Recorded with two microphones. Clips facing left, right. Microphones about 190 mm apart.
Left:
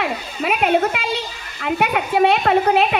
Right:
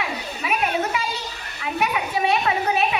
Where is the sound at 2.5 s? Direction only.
60° left (ahead or behind).